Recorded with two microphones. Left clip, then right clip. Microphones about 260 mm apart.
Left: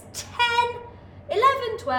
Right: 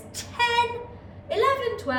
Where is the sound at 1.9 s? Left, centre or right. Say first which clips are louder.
Left 3 dB; centre.